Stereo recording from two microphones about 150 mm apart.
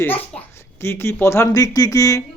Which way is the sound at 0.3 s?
15° left (ahead or behind).